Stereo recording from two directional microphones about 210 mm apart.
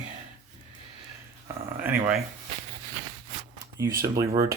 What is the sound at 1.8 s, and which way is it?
Speech, 10° right (ahead or behind).